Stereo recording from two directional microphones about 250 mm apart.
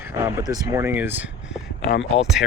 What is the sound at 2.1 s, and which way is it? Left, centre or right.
Speech, centre.